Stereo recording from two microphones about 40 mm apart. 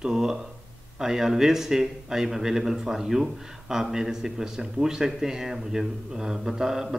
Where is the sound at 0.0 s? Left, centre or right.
Centre.